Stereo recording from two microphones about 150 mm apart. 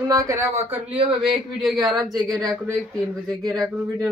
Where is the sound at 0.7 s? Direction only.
10° right (ahead or behind).